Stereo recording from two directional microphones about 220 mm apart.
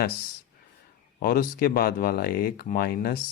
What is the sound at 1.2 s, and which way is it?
Speech, 40° left (ahead or behind).